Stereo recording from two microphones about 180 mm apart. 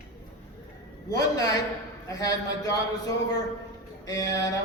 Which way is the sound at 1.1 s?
20° left (ahead or behind).